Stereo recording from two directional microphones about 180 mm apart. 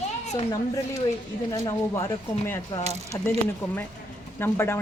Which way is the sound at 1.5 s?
15° left (ahead or behind).